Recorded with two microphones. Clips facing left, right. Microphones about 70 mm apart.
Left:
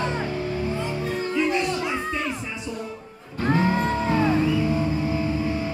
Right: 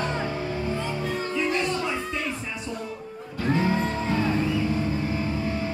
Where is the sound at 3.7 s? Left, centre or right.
Left.